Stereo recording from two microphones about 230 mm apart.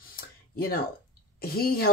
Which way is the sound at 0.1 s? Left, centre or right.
Left.